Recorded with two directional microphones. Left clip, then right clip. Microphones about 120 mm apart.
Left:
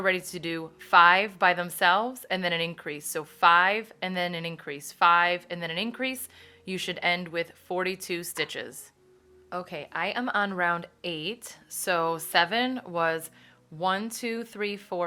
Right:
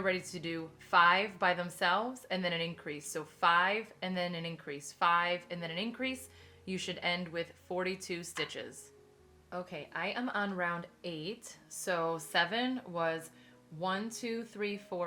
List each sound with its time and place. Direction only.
0.0 s a woman's voice: 40° left (ahead or behind)